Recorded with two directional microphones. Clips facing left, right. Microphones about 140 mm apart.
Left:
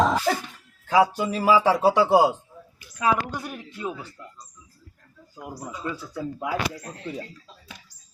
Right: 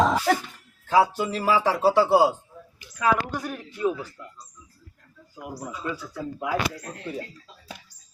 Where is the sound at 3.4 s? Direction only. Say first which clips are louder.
Right 5 dB; 15° left (ahead or behind).